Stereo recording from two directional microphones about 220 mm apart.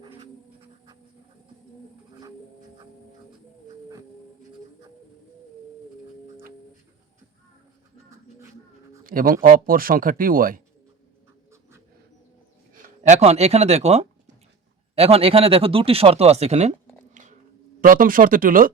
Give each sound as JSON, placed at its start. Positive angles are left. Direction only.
{"t": 9.0, "sound": "speech", "side_deg": -40}
{"t": 12.7, "sound": "speech", "side_deg": -30}
{"t": 17.7, "sound": "speech", "side_deg": -40}